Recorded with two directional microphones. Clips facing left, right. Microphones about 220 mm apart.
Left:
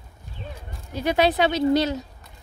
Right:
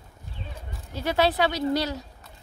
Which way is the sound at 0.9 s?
15° left (ahead or behind).